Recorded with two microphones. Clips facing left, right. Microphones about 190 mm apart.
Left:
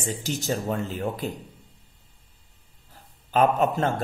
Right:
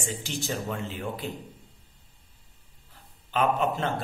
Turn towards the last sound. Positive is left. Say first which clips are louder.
# left 4 dB
turn(degrees=45)  # may be behind; listen again after turning